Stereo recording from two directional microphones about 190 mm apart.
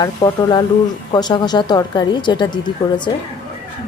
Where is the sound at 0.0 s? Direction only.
20° left (ahead or behind).